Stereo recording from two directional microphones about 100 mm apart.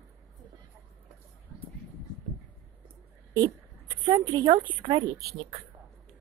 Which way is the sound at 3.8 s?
50° right (ahead or behind).